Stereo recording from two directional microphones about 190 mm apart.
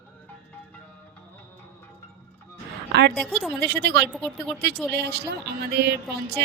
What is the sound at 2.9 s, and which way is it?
Speech, 60° right (ahead or behind).